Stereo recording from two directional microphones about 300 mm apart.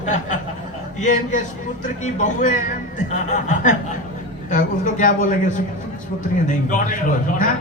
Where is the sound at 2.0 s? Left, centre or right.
Left.